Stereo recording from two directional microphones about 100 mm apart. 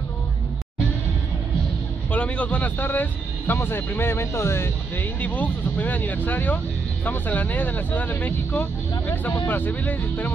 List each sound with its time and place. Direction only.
2.0 s speech: 15° left (ahead or behind)